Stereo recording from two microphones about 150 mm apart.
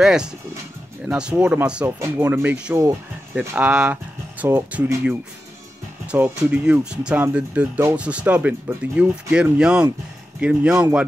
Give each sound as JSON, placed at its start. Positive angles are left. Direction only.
{"t": 0.0, "sound": "speech", "side_deg": -5}
{"t": 3.3, "sound": "speech", "side_deg": -5}
{"t": 6.1, "sound": "speech", "side_deg": -15}